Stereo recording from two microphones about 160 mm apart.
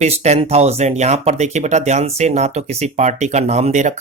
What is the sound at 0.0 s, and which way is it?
Speech, 45° right (ahead or behind).